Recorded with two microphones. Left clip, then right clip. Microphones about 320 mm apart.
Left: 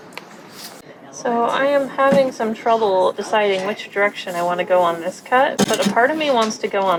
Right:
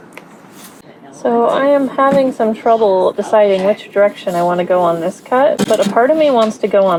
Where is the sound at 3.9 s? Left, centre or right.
Right.